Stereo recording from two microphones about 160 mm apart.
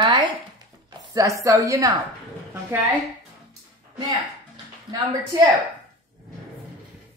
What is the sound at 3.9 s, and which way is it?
Speech, 25° right (ahead or behind).